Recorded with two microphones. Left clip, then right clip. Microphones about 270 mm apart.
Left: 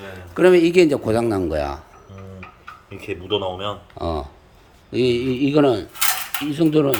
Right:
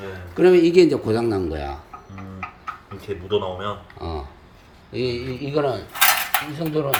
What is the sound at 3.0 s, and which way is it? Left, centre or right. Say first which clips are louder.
Speech: left 1 dB; left.